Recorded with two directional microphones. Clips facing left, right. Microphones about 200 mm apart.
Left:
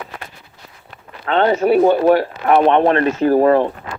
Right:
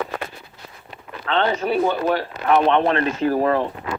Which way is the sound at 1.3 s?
45° left (ahead or behind).